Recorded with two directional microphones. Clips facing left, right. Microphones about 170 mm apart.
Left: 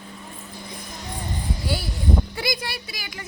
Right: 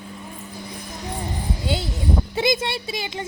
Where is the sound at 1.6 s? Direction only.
20° right (ahead or behind).